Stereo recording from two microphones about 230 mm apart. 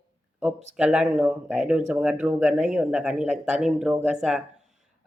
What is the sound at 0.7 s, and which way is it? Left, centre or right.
Speech, centre.